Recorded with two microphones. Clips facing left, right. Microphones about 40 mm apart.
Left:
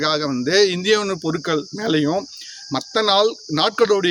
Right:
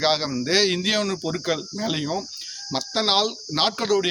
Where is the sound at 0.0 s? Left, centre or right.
Centre.